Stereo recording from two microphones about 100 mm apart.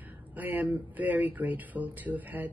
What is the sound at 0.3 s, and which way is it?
Speech, 20° right (ahead or behind).